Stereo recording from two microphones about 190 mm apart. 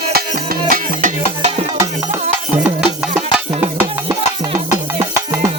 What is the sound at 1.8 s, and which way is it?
Music, 15° right (ahead or behind).